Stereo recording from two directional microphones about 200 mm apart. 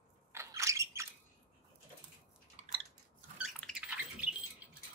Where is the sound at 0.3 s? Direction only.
15° right (ahead or behind).